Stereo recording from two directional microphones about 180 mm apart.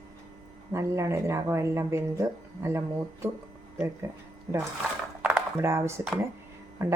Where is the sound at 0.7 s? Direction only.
15° right (ahead or behind).